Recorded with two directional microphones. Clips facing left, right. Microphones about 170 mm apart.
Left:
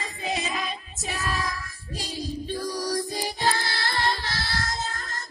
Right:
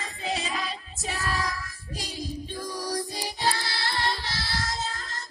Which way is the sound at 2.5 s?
35° left (ahead or behind).